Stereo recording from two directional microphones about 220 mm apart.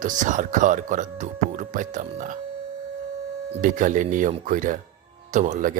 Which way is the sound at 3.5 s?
35° right (ahead or behind).